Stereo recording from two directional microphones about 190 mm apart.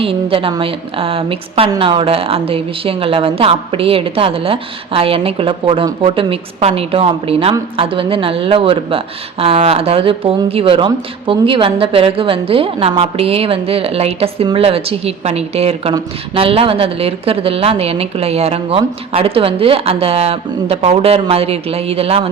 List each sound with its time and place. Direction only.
0.0 s a woman's voice: 30° right (ahead or behind)